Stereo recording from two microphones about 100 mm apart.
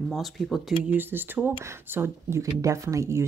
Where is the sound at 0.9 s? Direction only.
20° right (ahead or behind).